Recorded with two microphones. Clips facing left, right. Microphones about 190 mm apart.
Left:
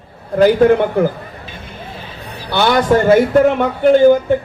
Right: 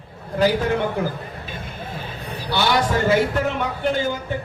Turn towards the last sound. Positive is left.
turn(degrees=55)  # may be behind; listen again after turning